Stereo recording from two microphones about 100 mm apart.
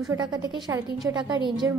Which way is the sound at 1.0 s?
30° right (ahead or behind).